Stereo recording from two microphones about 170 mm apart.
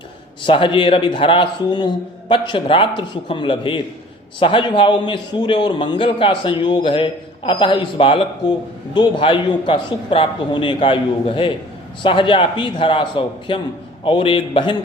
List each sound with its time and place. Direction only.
0.4 s a man's voice: 30° left (ahead or behind)